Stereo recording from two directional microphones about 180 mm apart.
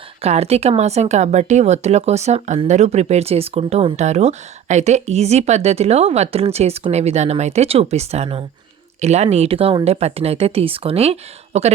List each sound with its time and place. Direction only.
0.2 s speech: 35° right (ahead or behind)